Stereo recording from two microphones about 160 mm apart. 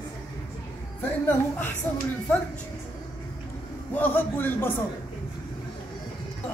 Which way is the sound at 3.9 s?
10° left (ahead or behind).